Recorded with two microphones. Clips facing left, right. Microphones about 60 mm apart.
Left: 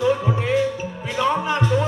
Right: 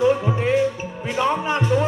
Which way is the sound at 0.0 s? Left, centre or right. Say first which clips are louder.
Right 2 dB; right.